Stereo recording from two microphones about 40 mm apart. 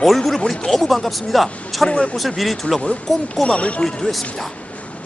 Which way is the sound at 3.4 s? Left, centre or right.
Left.